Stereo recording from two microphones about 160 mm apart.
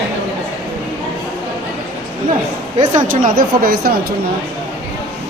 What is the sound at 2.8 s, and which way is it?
Speech, 50° right (ahead or behind).